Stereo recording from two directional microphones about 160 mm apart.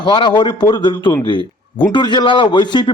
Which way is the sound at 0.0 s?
30° left (ahead or behind).